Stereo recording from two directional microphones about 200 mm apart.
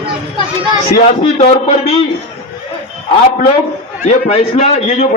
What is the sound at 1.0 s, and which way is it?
Speech, 35° left (ahead or behind).